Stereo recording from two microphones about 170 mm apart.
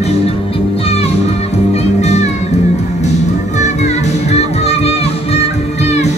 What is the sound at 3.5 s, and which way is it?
Music, 45° left (ahead or behind).